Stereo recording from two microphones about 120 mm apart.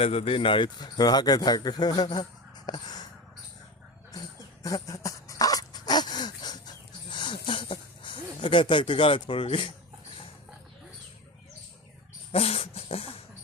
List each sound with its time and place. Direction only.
0.0 s speech: 55° left (ahead or behind); by 2.2 s 35° left (ahead or behind)
2.6 s caw: 35° left (ahead or behind)
4.1 s dog: 30° left (ahead or behind)
12.3 s dog: 60° left (ahead or behind)